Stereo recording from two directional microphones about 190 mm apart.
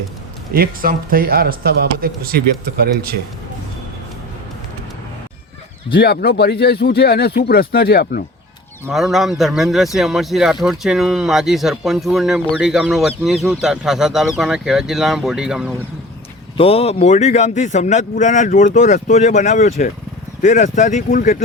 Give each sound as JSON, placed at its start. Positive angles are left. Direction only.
{"t": 0.5, "sound": "speech", "side_deg": -50}
{"t": 5.9, "sound": "speech", "side_deg": 55}
{"t": 8.9, "sound": "speech", "side_deg": 0}
{"t": 16.6, "sound": "a man's voice", "side_deg": 30}